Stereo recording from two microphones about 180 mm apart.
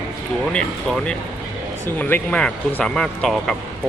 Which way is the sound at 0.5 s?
5° left (ahead or behind).